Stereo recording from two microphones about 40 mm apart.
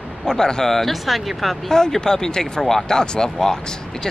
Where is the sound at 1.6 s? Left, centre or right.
Centre.